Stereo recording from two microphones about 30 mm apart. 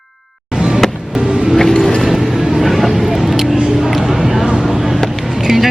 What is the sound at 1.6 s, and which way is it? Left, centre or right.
Music, centre.